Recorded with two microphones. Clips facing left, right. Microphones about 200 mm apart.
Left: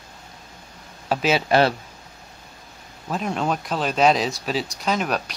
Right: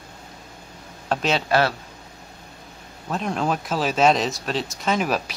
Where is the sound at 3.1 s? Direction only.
Centre (ahead or behind).